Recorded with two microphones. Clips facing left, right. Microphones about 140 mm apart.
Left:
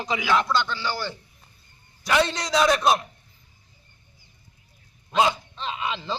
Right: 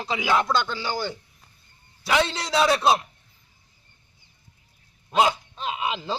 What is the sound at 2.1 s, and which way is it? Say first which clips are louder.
Speech: left 1 dB; 5° right (ahead or behind).